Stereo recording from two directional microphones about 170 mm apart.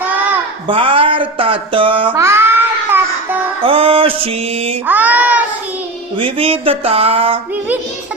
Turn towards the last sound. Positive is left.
turn(degrees=-35)  # may be behind; listen again after turning